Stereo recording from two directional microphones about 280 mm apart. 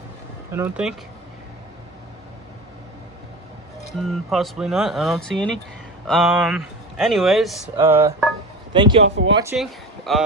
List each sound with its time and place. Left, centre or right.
0.5 s speech: centre
4.0 s speech: centre
7.8 s music: centre
9.0 s speech: right
9.3 s speech: centre